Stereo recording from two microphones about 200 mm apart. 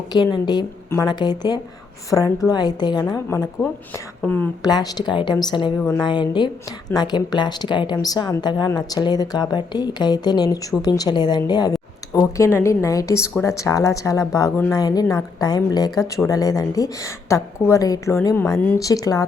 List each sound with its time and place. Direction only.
0.1 s a woman's voice: 20° left (ahead or behind)
4.6 s a woman's voice: 20° left (ahead or behind)